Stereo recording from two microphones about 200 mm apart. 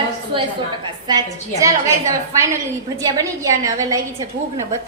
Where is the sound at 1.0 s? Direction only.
20° right (ahead or behind).